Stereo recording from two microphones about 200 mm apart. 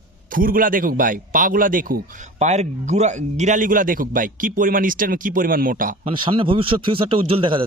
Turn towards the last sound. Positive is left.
turn(degrees=-25)  # may be behind; listen again after turning